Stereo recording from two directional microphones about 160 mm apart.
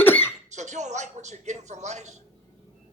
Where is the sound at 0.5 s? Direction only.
45° right (ahead or behind).